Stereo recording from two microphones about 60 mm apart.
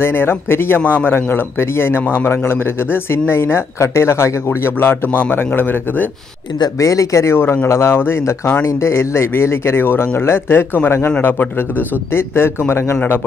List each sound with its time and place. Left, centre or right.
0.0 s a man's voice: left
6.8 s a man's voice: left